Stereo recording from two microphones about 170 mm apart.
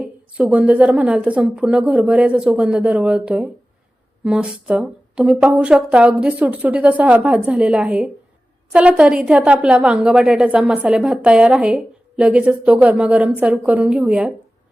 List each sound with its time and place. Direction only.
0.0 s a woman's voice: 5° right (ahead or behind)